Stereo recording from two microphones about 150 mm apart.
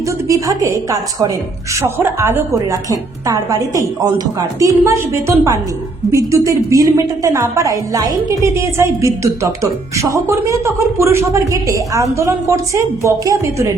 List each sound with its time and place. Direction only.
0.3 s a woman's voice: 20° right (ahead or behind)